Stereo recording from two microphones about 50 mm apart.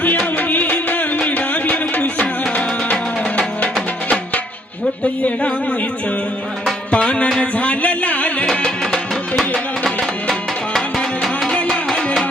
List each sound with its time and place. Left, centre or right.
0.3 s music: left
2.4 s music: left
5.2 s a sound: left
6.9 s music: left
8.6 s music: centre